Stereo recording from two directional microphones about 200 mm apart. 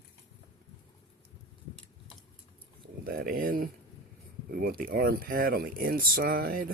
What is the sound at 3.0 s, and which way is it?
Speech, 45° right (ahead or behind).